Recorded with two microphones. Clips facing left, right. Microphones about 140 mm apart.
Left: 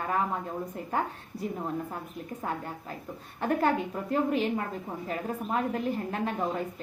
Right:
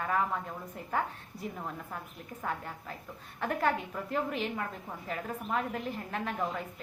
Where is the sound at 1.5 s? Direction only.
25° left (ahead or behind).